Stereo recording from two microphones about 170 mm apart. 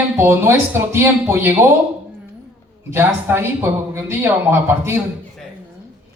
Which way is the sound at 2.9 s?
15° right (ahead or behind).